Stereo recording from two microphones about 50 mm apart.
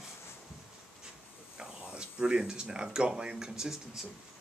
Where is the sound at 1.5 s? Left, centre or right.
Centre.